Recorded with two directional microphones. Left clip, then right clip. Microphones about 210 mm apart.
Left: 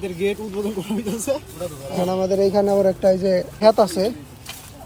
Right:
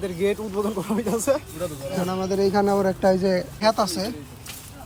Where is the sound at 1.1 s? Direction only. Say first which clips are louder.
Right 2 dB; 30° right (ahead or behind).